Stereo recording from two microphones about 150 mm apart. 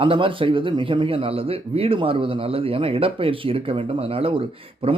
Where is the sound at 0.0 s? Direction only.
35° right (ahead or behind).